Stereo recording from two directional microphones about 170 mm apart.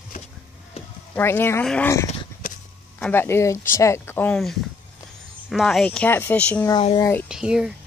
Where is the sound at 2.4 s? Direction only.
50° left (ahead or behind).